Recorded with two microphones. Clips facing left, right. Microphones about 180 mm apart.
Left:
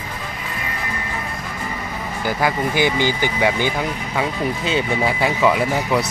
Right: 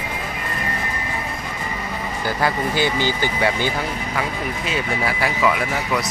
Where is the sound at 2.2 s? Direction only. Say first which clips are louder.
Left 2 dB; 15° left (ahead or behind).